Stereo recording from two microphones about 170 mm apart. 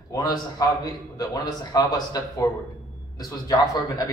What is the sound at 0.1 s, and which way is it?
A man's voice, 20° left (ahead or behind).